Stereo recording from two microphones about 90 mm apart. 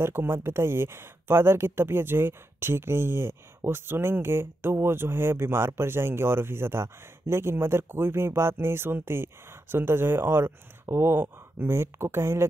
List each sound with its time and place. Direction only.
0.0 s speech: 25° right (ahead or behind)